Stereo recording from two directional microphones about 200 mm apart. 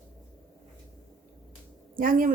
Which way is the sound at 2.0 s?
45° right (ahead or behind).